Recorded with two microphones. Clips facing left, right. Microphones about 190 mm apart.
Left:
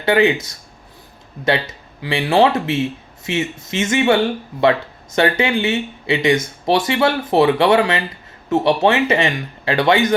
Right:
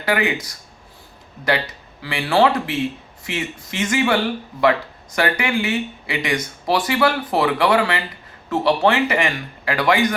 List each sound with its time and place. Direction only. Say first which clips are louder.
0.0 s speech: left 6 dB; 25° left (ahead or behind)